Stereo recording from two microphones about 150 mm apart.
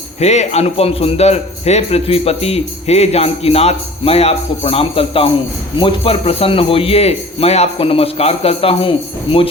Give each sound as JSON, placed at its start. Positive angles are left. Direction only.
{"t": 0.2, "sound": "a man's voice", "side_deg": 45}